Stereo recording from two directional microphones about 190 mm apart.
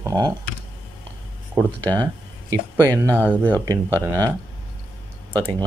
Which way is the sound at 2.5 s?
15° right (ahead or behind).